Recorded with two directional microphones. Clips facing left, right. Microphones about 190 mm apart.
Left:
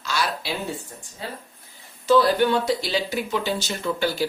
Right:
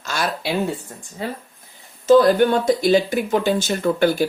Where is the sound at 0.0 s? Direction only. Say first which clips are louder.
Right 3 dB; 50° right (ahead or behind).